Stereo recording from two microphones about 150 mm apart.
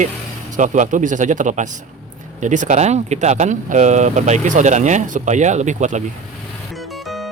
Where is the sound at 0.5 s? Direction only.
55° right (ahead or behind).